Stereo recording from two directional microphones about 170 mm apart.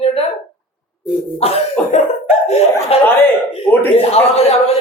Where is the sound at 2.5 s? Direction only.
40° left (ahead or behind).